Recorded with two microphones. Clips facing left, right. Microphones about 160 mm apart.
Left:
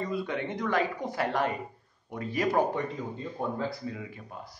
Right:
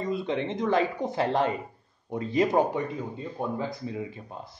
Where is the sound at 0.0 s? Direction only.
25° right (ahead or behind).